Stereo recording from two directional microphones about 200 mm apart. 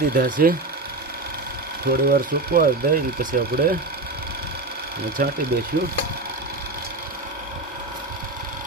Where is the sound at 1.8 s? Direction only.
50° right (ahead or behind).